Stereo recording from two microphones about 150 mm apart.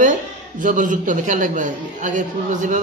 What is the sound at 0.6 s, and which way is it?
A man's voice, 60° right (ahead or behind).